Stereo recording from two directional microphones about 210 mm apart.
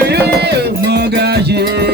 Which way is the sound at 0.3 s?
50° right (ahead or behind).